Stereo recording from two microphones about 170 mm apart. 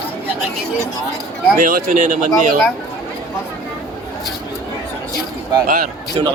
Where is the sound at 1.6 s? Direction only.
55° right (ahead or behind).